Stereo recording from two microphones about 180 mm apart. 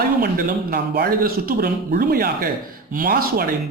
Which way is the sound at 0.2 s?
55° right (ahead or behind).